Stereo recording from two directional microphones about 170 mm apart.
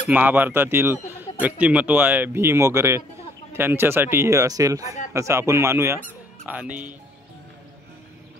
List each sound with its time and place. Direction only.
0.1 s speech: 10° right (ahead or behind)